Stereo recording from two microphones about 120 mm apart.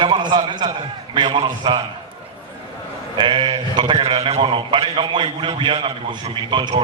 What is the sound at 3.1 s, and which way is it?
A man's voice, 45° right (ahead or behind).